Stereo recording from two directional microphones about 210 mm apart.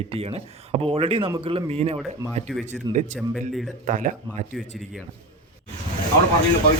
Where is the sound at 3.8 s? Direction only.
35° right (ahead or behind).